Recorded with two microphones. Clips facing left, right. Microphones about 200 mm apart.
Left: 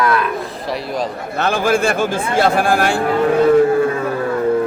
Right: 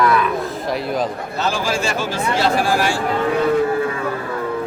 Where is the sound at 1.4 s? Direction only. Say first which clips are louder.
Left 5 dB; 55° left (ahead or behind).